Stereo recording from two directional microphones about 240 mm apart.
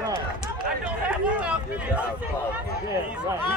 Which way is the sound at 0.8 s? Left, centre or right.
Centre.